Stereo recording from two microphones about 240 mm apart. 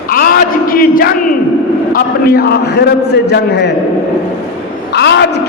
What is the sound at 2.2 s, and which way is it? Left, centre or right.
Speech, left.